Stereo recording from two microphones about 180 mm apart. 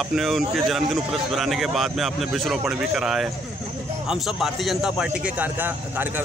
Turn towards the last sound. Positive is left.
turn(degrees=-10)  # may be behind; listen again after turning